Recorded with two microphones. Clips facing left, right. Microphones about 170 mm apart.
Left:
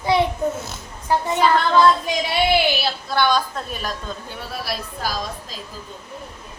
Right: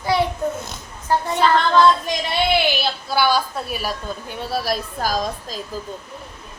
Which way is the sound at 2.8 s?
5° right (ahead or behind).